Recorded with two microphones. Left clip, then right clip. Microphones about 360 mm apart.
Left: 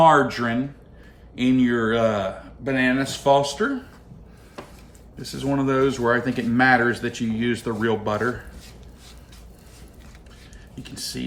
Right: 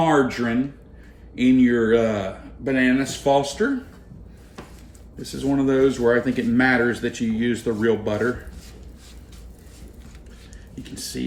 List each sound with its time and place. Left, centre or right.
0.0 s speech: centre
5.2 s speech: centre
10.8 s speech: centre